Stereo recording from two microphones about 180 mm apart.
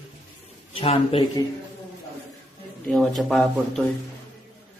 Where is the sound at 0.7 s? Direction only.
30° left (ahead or behind).